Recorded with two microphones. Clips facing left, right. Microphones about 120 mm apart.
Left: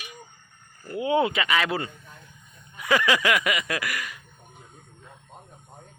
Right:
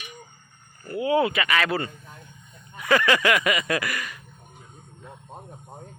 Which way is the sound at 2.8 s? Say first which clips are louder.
Right 2 dB; 10° left (ahead or behind).